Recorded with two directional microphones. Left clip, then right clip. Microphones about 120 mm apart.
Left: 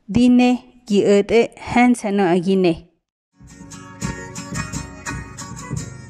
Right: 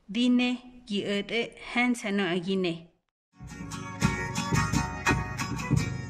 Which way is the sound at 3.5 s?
25° right (ahead or behind).